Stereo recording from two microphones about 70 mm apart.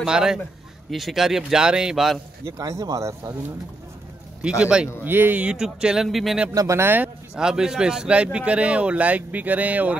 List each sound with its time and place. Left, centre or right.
0.0 s speech: centre
2.4 s speech: right
4.4 s speech: centre
5.0 s speech: right
5.4 s speech: centre
6.5 s speech: right
6.8 s speech: right
7.3 s speech: centre